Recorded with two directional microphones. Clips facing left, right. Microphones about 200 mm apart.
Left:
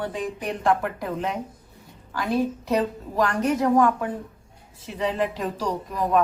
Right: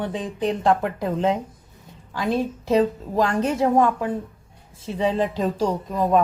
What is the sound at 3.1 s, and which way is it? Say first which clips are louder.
Speech: even; 25° right (ahead or behind).